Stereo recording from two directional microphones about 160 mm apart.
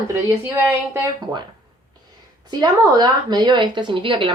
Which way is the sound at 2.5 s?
25° right (ahead or behind).